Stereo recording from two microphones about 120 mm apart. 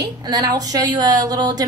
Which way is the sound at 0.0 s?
35° right (ahead or behind).